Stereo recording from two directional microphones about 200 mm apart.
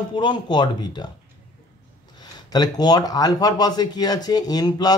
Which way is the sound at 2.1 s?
20° left (ahead or behind).